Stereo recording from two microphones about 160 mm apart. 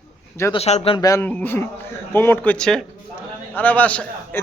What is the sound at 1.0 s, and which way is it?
A man's voice, 20° left (ahead or behind).